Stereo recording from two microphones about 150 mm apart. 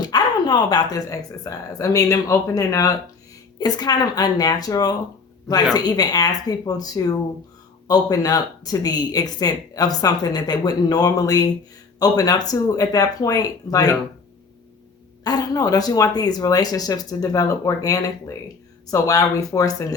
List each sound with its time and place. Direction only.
0.0 s speech: 30° left (ahead or behind)
15.2 s speech: 25° left (ahead or behind)